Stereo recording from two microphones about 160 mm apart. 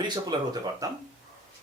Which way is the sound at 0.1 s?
25° right (ahead or behind).